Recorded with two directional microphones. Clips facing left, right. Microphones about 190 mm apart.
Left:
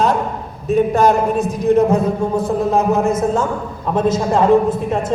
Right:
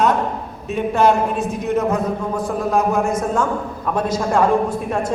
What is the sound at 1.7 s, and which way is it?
A man's voice, 30° left (ahead or behind).